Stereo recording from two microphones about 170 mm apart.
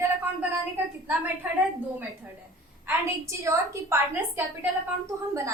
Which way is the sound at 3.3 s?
15° right (ahead or behind).